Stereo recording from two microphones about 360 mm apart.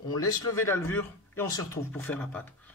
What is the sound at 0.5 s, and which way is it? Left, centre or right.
Speech, centre.